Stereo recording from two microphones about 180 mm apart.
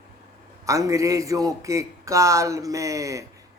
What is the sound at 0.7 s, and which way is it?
A man's voice, 15° right (ahead or behind).